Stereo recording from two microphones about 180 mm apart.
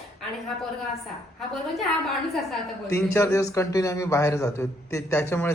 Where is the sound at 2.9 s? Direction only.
15° left (ahead or behind).